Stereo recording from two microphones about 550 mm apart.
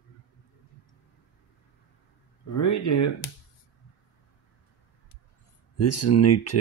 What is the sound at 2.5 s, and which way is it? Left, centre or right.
Speech, left.